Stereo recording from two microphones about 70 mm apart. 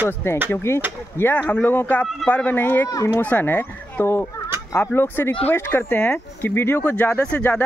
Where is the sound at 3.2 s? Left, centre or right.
Left.